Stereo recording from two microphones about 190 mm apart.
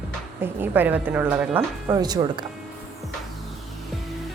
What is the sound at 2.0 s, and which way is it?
Speech, 20° right (ahead or behind).